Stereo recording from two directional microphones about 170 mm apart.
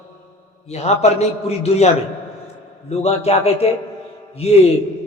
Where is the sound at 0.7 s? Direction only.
40° left (ahead or behind).